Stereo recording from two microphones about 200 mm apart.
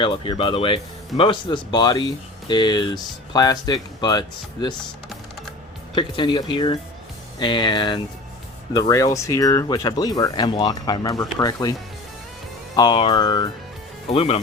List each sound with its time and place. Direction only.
0.0 s speech: 25° left (ahead or behind)
5.9 s speech: 25° left (ahead or behind)
12.7 s speech: 20° left (ahead or behind)